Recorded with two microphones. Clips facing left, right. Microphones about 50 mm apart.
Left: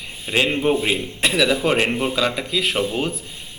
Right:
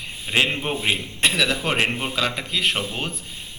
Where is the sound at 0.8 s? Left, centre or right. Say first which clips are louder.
Left 1 dB; centre.